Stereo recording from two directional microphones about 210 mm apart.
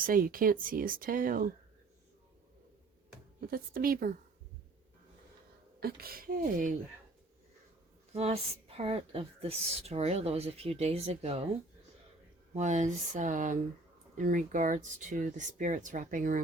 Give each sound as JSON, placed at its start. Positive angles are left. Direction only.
{"t": 0.0, "sound": "speech", "side_deg": -40}
{"t": 3.4, "sound": "speech", "side_deg": -45}
{"t": 5.8, "sound": "speech", "side_deg": -45}
{"t": 8.1, "sound": "a woman's voice", "side_deg": -30}
{"t": 12.5, "sound": "speech", "side_deg": -35}